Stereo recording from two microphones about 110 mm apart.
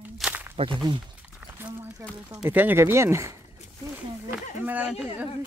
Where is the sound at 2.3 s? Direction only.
20° right (ahead or behind).